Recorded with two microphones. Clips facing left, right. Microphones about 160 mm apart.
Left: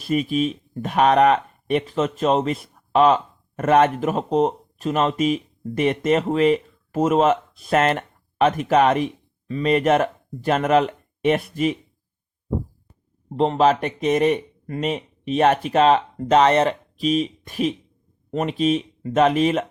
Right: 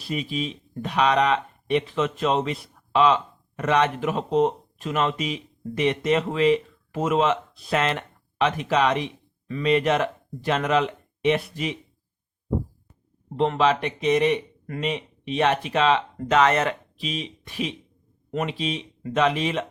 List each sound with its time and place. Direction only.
0.0 s speech: 50° left (ahead or behind)
13.3 s speech: 35° left (ahead or behind)